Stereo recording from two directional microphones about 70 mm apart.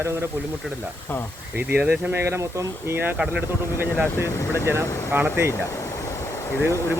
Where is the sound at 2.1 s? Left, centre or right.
Right.